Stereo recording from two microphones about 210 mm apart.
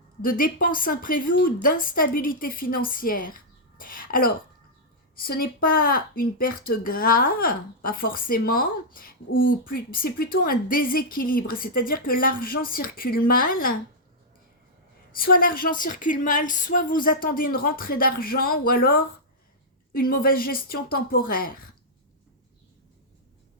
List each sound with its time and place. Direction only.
0.2 s speech: 45° left (ahead or behind)
15.1 s speech: 45° left (ahead or behind)